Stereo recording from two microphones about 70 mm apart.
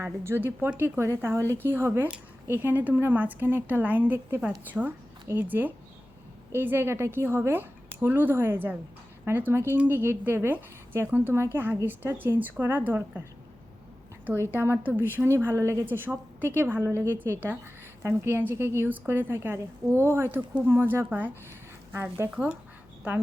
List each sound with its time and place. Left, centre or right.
0.0 s a woman's voice: right
14.5 s speech: right
15.9 s a woman's voice: right